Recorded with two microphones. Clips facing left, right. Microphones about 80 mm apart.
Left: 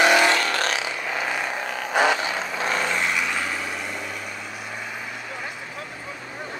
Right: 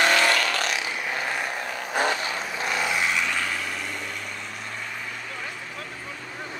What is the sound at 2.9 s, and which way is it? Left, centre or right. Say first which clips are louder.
Vehicle: left 1 dB; centre.